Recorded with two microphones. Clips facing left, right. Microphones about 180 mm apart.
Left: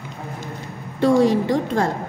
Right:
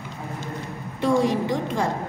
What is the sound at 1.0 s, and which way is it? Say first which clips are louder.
Speech: left 5 dB; 70° left (ahead or behind).